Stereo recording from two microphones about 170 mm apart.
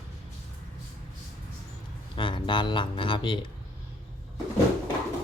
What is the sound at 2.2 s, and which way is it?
Speech, 30° left (ahead or behind).